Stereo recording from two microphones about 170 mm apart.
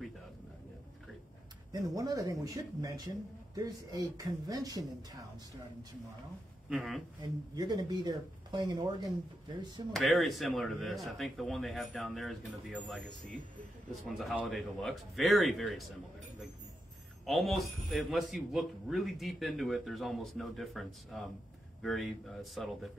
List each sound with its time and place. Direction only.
1.7 s speech: 20° right (ahead or behind)
6.7 s speech: 5° right (ahead or behind)
7.5 s speech: 25° right (ahead or behind)
9.9 s speech: centre (ahead or behind)
17.3 s speech: centre (ahead or behind)